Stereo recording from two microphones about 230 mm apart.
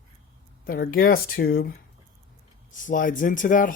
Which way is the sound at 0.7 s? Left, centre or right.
Left.